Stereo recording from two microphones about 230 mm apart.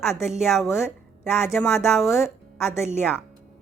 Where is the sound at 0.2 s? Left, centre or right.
Centre.